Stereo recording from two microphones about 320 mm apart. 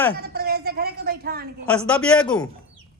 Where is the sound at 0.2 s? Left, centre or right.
Right.